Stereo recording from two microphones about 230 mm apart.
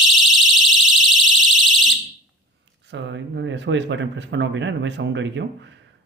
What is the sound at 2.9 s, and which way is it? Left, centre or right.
Speech, right.